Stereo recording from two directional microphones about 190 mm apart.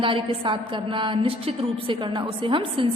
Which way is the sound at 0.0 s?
25° right (ahead or behind).